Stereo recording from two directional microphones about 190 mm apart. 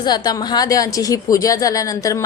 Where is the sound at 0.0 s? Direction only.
20° left (ahead or behind).